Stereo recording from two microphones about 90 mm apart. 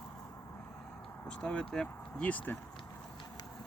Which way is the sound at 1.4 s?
10° left (ahead or behind).